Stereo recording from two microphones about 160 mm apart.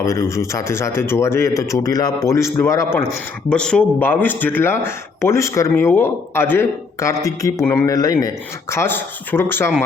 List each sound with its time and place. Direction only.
0.0 s speech: 20° left (ahead or behind)
3.5 s speech: 5° left (ahead or behind)